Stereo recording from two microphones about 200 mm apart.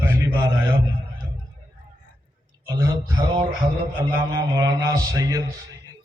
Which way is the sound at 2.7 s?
15° right (ahead or behind).